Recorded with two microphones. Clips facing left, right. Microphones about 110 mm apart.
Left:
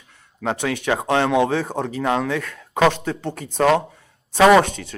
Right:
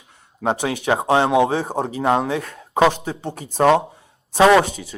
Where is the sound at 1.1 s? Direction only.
20° right (ahead or behind).